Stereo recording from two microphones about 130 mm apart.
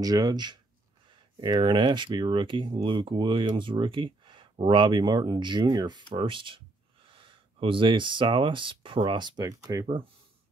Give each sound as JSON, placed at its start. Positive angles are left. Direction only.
{"t": 0.0, "sound": "speech", "side_deg": -30}